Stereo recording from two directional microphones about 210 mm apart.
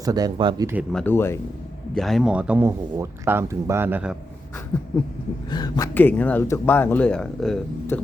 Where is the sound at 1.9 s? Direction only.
Centre (ahead or behind).